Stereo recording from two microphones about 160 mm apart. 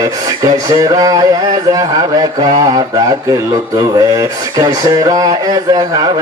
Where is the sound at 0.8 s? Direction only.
20° right (ahead or behind).